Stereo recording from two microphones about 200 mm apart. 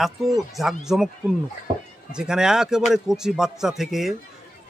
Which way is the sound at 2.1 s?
5° right (ahead or behind).